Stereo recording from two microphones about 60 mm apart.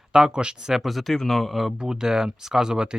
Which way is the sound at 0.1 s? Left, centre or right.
Centre.